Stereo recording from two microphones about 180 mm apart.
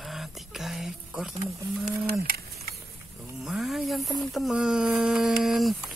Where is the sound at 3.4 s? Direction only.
Centre (ahead or behind).